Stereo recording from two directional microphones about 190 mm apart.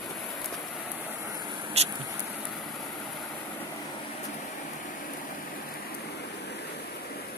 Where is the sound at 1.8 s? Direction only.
35° right (ahead or behind).